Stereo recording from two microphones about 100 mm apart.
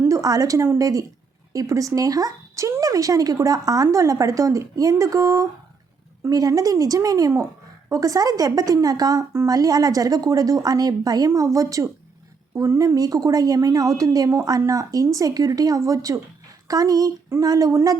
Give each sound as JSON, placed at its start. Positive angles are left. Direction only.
{"t": 0.0, "sound": "speech", "side_deg": -35}